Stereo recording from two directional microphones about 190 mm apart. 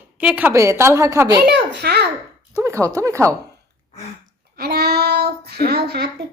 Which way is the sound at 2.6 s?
15° right (ahead or behind).